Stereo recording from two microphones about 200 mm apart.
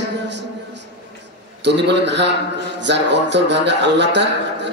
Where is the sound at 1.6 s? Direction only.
60° right (ahead or behind).